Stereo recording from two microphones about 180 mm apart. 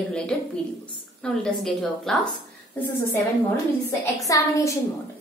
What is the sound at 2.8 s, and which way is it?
A woman's voice, 15° left (ahead or behind).